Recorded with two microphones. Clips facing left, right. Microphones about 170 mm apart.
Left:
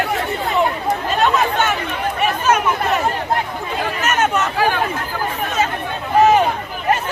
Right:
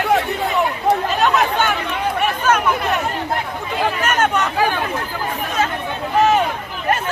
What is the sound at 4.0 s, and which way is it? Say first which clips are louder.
Chatter: left 2 dB; 5° left (ahead or behind).